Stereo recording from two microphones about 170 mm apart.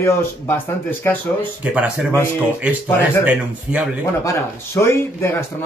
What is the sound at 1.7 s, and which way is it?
Speech, 5° right (ahead or behind).